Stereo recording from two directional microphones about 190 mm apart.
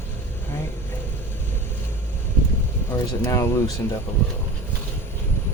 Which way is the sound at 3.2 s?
15° left (ahead or behind).